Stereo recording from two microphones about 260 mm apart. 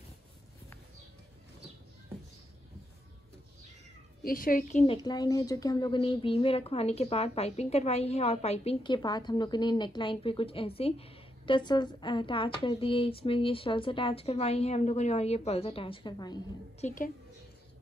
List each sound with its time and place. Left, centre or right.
4.2 s speech: left
4.9 s a woman's voice: centre
16.8 s a woman's voice: left